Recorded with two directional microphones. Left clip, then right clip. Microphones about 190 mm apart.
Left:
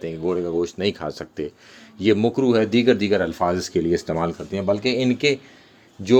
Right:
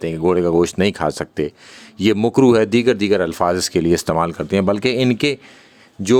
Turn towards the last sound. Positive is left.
turn(degrees=-35)  # may be behind; listen again after turning